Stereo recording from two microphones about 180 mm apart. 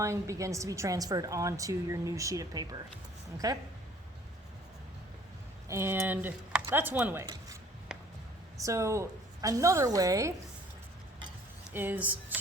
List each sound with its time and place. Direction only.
0.0 s a woman's voice: 15° right (ahead or behind)
5.6 s a woman's voice: 15° right (ahead or behind)
8.6 s a woman's voice: 15° right (ahead or behind)
11.7 s speech: 10° right (ahead or behind)